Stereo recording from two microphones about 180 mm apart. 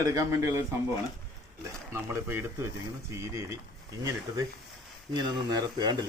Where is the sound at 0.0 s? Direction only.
20° right (ahead or behind).